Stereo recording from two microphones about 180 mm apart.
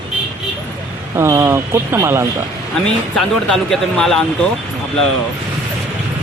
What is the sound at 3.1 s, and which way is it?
Speech, 5° left (ahead or behind).